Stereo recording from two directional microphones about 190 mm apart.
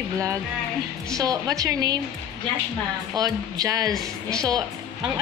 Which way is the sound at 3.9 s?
5° left (ahead or behind).